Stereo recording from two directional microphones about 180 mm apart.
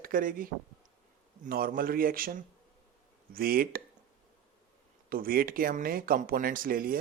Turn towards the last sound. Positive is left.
turn(degrees=-55)  # may be behind; listen again after turning